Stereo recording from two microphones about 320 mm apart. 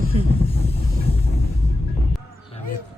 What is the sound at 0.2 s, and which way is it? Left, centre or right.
Vehicle, centre.